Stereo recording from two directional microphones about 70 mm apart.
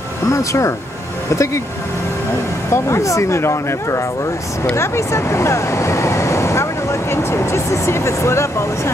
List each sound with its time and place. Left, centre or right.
0.3 s speech: left
2.7 s speech: left